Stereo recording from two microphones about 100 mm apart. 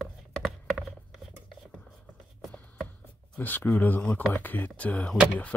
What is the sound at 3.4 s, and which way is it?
Speech, 20° left (ahead or behind).